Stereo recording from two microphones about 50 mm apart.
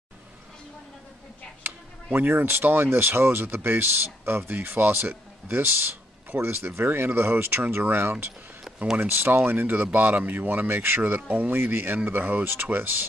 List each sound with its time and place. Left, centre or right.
2.0 s speech: right
11.2 s speech: right
11.5 s speech: right